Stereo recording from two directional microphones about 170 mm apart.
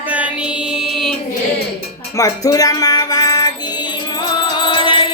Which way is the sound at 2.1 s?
20° left (ahead or behind).